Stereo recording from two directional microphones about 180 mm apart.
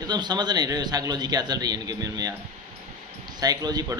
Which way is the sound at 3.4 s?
20° right (ahead or behind).